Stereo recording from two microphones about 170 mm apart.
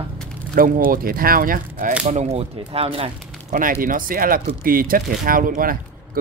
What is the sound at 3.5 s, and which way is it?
Speech, 50° right (ahead or behind).